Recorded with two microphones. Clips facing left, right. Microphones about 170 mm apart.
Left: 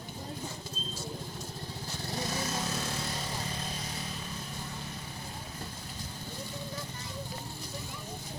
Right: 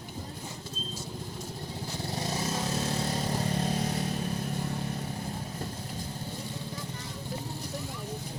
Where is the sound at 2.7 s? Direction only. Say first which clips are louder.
Right 6 dB; 35° right (ahead or behind); by 4.5 s 55° right (ahead or behind).